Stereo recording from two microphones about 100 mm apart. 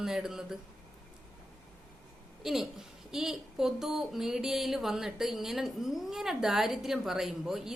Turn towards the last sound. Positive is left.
turn(degrees=-5)  # may be behind; listen again after turning